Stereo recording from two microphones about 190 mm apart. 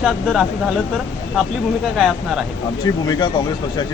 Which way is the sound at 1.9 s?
Centre (ahead or behind).